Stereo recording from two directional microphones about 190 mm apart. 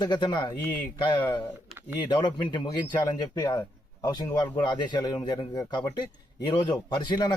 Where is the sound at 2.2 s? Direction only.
25° left (ahead or behind).